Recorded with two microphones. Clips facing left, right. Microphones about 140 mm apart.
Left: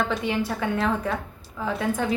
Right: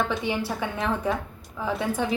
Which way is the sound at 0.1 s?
5° right (ahead or behind).